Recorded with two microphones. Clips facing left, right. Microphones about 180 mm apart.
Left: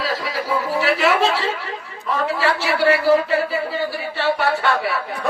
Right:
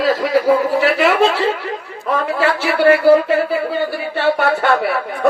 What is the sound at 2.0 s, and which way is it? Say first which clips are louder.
A man's voice: right 3 dB; 55° right (ahead or behind).